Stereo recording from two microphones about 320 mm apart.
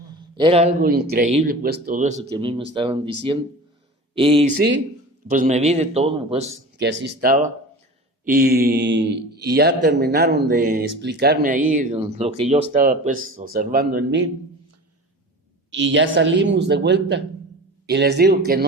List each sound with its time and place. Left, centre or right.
0.3 s a man's voice: centre
6.7 s a man's voice: right
15.7 s a man's voice: right